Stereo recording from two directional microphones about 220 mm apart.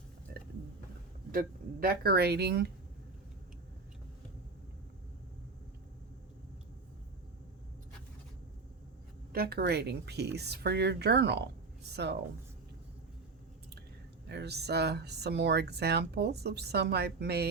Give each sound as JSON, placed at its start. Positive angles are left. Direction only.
{"t": 1.3, "sound": "speech", "side_deg": -40}
{"t": 9.3, "sound": "speech", "side_deg": -45}
{"t": 14.3, "sound": "speech", "side_deg": -50}